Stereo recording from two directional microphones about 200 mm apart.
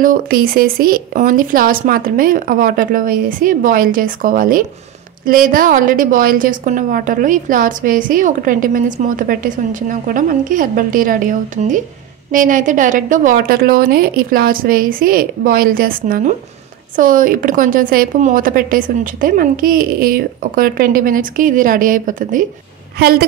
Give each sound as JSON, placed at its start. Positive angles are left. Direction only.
{"t": 0.0, "sound": "a woman's voice", "side_deg": -45}